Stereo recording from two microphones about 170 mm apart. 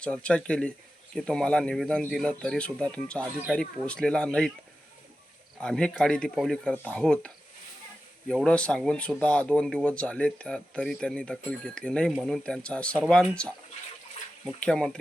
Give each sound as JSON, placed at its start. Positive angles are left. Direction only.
{"t": 0.0, "sound": "speech", "side_deg": 5}
{"t": 5.5, "sound": "speech", "side_deg": 5}
{"t": 14.6, "sound": "speech", "side_deg": 5}